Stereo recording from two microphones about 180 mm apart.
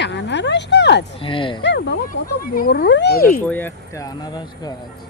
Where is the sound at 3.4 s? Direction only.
10° left (ahead or behind).